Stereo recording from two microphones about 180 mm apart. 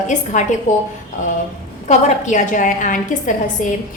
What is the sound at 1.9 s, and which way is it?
A woman's voice, 40° left (ahead or behind).